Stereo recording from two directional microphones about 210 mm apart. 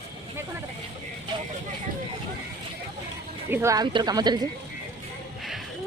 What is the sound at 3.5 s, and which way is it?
Speech, 10° right (ahead or behind).